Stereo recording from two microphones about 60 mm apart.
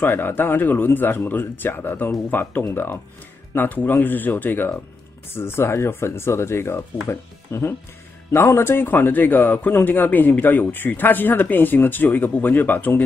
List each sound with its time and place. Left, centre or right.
0.0 s a man's voice: left